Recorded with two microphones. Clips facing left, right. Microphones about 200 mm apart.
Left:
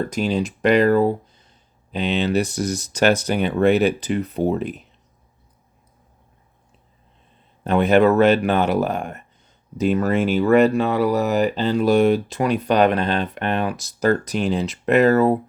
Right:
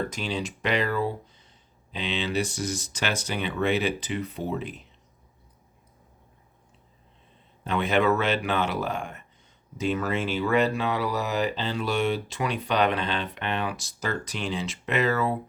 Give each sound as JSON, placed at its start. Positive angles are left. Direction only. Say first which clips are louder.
{"t": 0.1, "sound": "speech", "louder": "left 9 dB", "side_deg": 40}
{"t": 7.6, "sound": "speech", "louder": "left 8 dB", "side_deg": 40}
{"t": 9.0, "sound": "speech", "louder": "left 6 dB", "side_deg": 60}
{"t": 9.7, "sound": "speech", "louder": "left 8 dB", "side_deg": 40}